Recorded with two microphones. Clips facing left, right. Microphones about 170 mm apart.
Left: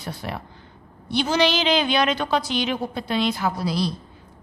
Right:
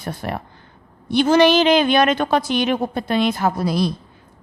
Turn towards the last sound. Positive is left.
turn(degrees=-50)  # may be behind; listen again after turning